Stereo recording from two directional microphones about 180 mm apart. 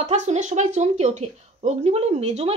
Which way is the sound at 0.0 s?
40° right (ahead or behind).